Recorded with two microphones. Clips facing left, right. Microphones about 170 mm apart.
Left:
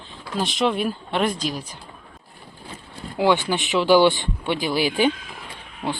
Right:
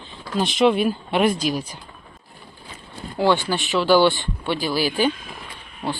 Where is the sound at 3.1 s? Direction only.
15° left (ahead or behind).